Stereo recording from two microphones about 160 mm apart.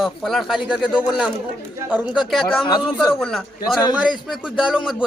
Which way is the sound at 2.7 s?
30° left (ahead or behind).